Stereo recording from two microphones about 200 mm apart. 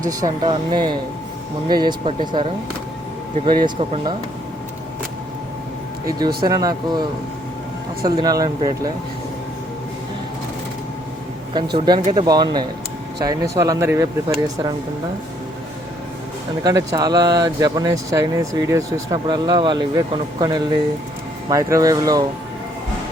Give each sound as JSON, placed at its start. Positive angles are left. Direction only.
{"t": 0.0, "sound": "speech", "side_deg": -15}
{"t": 6.1, "sound": "speech", "side_deg": -20}
{"t": 8.0, "sound": "speech", "side_deg": -20}
{"t": 11.5, "sound": "speech", "side_deg": -20}
{"t": 16.6, "sound": "speech", "side_deg": -20}